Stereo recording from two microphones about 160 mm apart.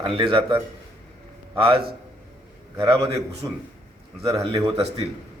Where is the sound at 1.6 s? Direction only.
35° right (ahead or behind).